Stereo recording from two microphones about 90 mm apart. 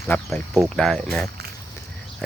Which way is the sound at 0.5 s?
Centre (ahead or behind).